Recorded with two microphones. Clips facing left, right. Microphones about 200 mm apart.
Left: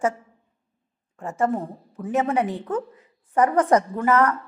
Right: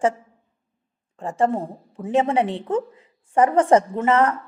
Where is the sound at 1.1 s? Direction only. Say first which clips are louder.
Right 2 dB; 30° right (ahead or behind).